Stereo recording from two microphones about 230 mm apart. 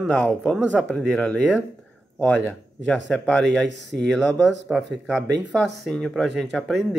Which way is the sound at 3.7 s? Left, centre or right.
Right.